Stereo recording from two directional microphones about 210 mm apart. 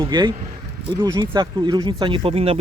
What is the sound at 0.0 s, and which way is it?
Speech, 20° right (ahead or behind).